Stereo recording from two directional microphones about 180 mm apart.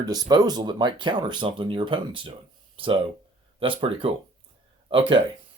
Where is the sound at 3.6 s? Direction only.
30° right (ahead or behind).